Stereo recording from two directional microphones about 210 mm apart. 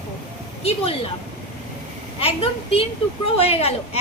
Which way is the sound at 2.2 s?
25° left (ahead or behind).